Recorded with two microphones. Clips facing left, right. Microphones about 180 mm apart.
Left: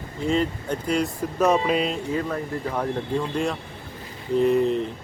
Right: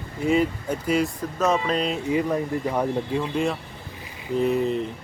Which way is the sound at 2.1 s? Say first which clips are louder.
Right 3 dB; 10° right (ahead or behind).